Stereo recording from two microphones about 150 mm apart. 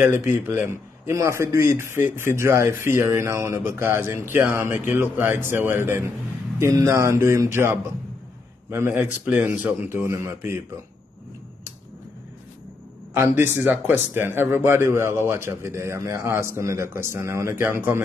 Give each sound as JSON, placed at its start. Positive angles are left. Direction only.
{"t": 0.0, "sound": "a man's voice", "side_deg": -15}
{"t": 13.1, "sound": "speech", "side_deg": -15}